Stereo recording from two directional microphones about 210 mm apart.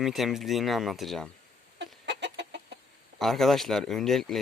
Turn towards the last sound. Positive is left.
turn(degrees=0)  # may be behind; listen again after turning